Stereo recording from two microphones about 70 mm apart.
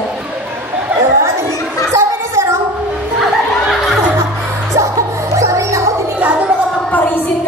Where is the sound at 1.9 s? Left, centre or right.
Right.